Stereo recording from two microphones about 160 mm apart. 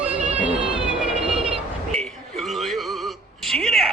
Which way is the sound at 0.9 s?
5° right (ahead or behind).